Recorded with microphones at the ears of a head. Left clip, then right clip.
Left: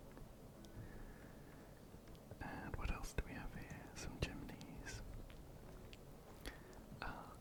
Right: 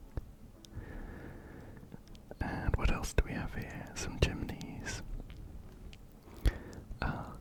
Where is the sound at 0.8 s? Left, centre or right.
Right.